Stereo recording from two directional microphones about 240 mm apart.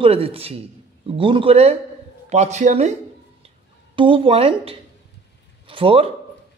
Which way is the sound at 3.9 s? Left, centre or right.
Right.